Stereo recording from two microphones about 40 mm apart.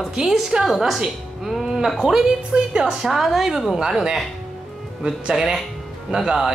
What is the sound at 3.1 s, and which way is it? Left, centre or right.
A woman's voice, centre.